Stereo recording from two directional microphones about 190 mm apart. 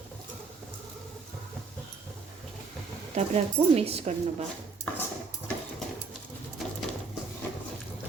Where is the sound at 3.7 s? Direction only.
30° right (ahead or behind).